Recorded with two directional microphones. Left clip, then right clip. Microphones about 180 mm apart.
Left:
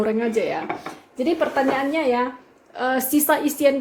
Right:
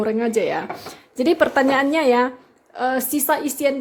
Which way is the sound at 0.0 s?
30° right (ahead or behind).